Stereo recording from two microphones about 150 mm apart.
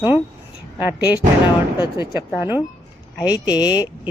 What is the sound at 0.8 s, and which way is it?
Speech, 10° right (ahead or behind).